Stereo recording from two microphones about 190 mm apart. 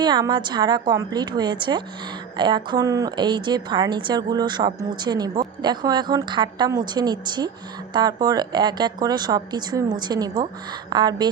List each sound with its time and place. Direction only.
0.0 s a woman's voice: 25° right (ahead or behind)